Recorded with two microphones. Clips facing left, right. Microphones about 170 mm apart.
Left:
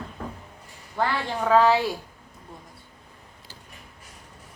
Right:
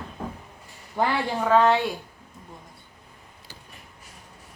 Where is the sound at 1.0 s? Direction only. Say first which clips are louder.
Right 1 dB; 20° right (ahead or behind).